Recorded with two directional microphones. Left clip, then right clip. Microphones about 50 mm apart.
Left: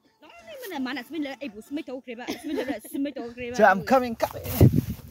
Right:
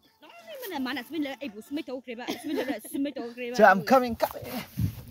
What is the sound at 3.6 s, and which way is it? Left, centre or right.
Speech, right.